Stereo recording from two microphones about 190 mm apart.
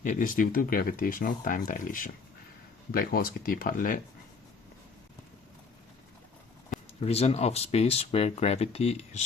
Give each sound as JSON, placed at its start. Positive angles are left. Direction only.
{"t": 0.0, "sound": "speech", "side_deg": 45}
{"t": 7.0, "sound": "speech", "side_deg": 30}